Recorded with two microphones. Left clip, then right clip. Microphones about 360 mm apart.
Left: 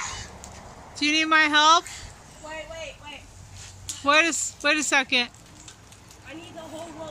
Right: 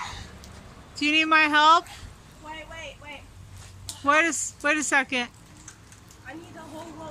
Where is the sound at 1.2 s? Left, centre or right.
Centre.